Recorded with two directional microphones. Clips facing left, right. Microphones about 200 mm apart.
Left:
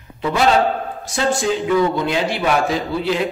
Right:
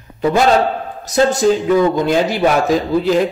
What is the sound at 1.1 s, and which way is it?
A man's voice, 40° right (ahead or behind).